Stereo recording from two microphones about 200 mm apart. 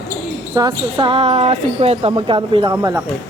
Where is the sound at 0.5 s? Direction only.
25° right (ahead or behind).